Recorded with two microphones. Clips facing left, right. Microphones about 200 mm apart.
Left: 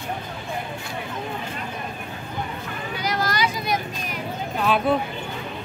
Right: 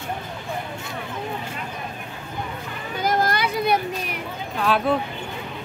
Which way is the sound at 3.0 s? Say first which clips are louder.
Right 3 dB; 50° right (ahead or behind).